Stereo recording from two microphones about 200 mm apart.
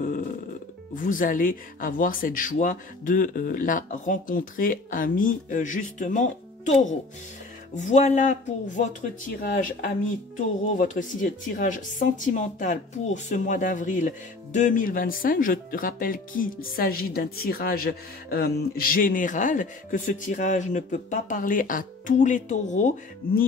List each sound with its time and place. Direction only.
0.9 s speech: 40° left (ahead or behind)